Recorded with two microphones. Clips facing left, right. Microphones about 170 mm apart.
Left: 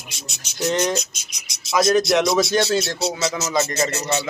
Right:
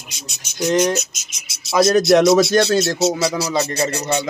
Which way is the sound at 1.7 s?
35° right (ahead or behind).